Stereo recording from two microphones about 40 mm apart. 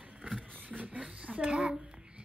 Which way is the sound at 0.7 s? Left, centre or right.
Right.